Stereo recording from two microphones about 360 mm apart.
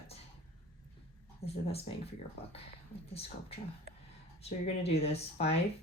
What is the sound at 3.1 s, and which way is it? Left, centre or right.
Speech, centre.